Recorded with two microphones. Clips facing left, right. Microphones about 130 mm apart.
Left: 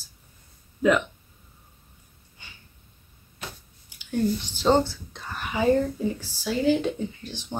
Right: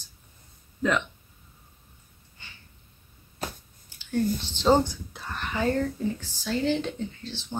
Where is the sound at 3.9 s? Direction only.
15° left (ahead or behind).